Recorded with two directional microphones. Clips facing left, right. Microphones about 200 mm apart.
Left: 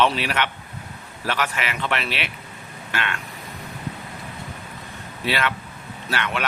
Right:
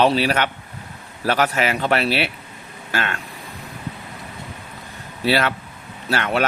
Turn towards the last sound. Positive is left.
turn(degrees=-40)  # may be behind; listen again after turning